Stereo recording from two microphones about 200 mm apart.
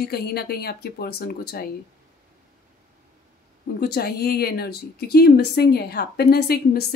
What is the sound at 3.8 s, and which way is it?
Speech, 50° left (ahead or behind).